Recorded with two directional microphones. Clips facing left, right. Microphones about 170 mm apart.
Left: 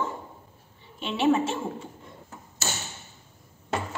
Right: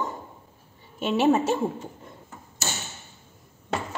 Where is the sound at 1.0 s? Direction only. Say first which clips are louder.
Right 2 dB; 45° right (ahead or behind).